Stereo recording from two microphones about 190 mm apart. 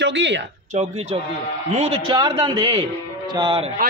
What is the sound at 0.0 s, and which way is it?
Speech, 70° right (ahead or behind).